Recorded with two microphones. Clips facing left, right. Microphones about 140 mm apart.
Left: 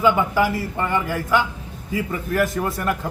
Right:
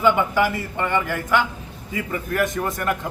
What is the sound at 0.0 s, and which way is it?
A man's voice, centre (ahead or behind).